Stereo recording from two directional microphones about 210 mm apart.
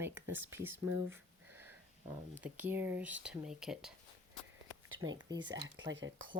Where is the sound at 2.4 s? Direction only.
10° right (ahead or behind).